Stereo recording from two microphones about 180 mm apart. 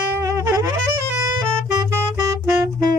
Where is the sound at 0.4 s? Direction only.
15° right (ahead or behind).